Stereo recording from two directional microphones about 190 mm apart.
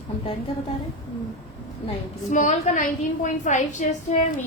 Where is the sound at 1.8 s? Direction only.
40° left (ahead or behind).